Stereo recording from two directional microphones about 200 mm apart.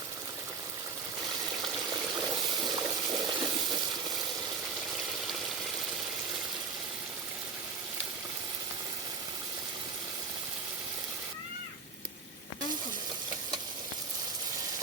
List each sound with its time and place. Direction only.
1.9 s water: 20° right (ahead or behind)